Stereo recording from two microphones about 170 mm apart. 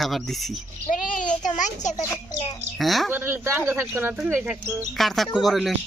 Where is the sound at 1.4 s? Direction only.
45° left (ahead or behind).